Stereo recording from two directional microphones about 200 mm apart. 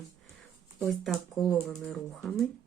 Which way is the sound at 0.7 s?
Centre (ahead or behind).